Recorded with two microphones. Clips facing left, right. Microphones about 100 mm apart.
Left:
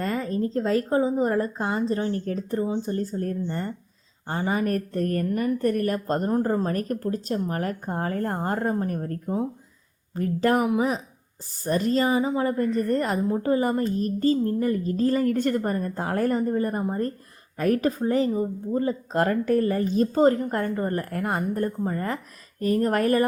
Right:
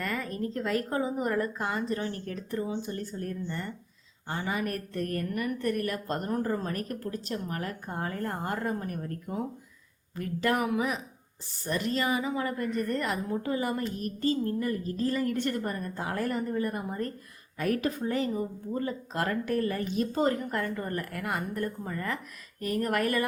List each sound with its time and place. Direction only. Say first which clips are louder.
0.0 s a woman's voice: left 6 dB; 30° left (ahead or behind)